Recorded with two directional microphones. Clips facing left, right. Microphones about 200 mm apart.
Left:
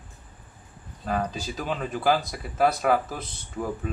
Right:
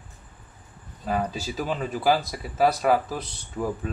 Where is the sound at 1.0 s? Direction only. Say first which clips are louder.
Right 1 dB; 5° right (ahead or behind).